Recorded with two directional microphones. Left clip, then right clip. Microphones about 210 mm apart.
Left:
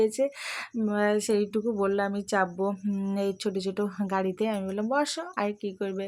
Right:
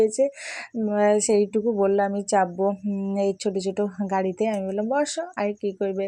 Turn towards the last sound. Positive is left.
turn(degrees=-10)  # may be behind; listen again after turning